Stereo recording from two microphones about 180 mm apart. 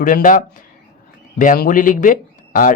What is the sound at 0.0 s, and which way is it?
Speech, 45° left (ahead or behind).